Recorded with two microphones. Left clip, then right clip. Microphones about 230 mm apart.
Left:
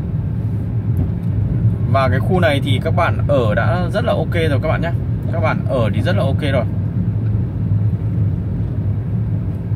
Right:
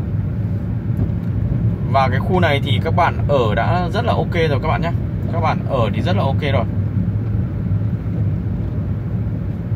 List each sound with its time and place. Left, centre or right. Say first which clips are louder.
1.9 s speech: even; centre